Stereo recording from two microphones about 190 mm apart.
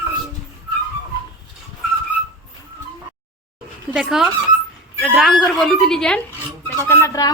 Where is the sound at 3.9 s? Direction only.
5° right (ahead or behind).